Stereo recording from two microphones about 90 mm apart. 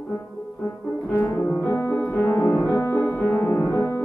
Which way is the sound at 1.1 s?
30° left (ahead or behind).